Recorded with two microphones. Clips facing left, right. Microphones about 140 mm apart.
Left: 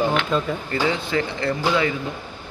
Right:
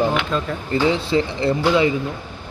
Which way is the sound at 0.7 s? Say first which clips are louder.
Right 8 dB; 20° right (ahead or behind).